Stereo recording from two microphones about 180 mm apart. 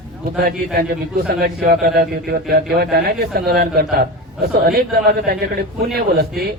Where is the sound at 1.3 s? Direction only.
60° right (ahead or behind).